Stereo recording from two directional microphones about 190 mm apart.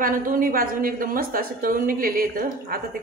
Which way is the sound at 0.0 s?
45° right (ahead or behind).